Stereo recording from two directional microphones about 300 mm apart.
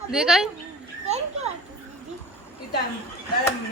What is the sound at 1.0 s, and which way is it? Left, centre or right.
Children playing, right.